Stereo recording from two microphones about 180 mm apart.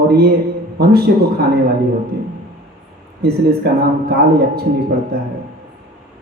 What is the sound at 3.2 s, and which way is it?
Speech, 60° right (ahead or behind).